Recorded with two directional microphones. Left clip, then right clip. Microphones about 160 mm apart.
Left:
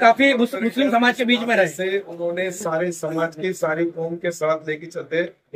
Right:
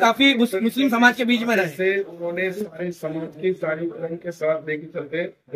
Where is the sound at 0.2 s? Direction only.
55° right (ahead or behind).